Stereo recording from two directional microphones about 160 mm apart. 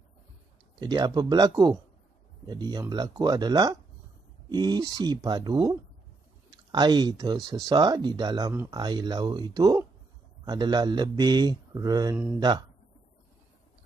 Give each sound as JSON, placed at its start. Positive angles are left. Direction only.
{"t": 0.7, "sound": "speech", "side_deg": -25}